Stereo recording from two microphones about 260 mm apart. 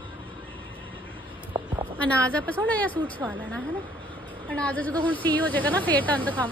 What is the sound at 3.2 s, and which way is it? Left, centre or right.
Speech, centre.